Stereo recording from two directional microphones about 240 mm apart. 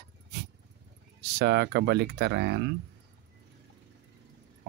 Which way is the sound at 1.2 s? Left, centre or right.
Right.